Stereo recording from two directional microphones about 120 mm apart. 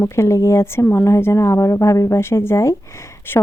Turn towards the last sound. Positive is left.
turn(degrees=20)  # may be behind; listen again after turning